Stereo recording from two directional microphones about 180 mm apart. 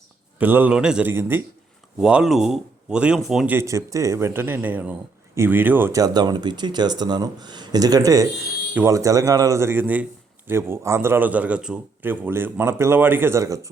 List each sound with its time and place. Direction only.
0.3 s speech: 10° right (ahead or behind)